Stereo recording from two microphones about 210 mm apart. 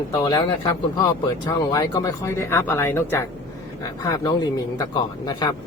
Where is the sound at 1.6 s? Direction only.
15° left (ahead or behind).